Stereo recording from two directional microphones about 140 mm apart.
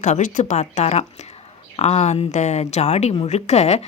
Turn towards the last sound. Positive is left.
turn(degrees=50)  # may be behind; listen again after turning